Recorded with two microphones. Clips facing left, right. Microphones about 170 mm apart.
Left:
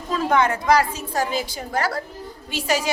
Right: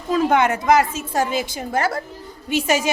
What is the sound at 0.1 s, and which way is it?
A woman's voice, 20° right (ahead or behind).